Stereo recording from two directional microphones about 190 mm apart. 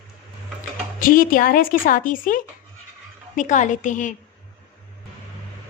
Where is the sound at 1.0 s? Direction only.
45° left (ahead or behind).